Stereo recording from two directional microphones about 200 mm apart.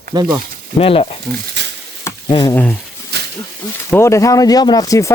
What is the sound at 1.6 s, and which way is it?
Stir, 60° right (ahead or behind).